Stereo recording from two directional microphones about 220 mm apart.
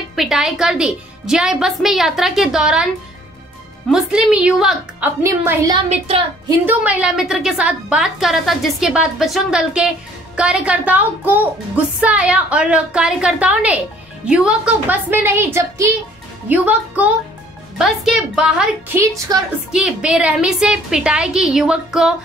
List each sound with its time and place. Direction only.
0.1 s speech: centre (ahead or behind)
3.9 s speech: 5° right (ahead or behind)
5.9 s a woman's voice: 25° right (ahead or behind)
6.6 s a woman's voice: 5° right (ahead or behind)